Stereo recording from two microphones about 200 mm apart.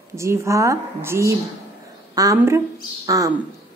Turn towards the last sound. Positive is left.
turn(degrees=-15)  # may be behind; listen again after turning